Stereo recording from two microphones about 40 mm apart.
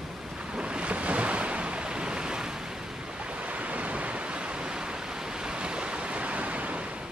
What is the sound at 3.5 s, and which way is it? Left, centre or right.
Waves, right.